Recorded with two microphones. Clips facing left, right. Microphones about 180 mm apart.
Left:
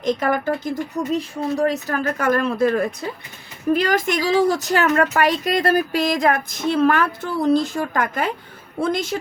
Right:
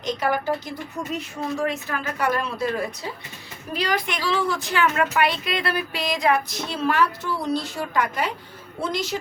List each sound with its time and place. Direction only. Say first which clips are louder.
0.0 s a woman's voice: left 4 dB; 50° left (ahead or behind)
1.5 s a woman's voice: left 6 dB; 40° left (ahead or behind)